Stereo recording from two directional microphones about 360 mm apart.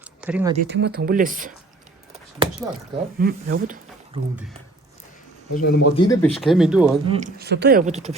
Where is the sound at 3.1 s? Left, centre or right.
Right.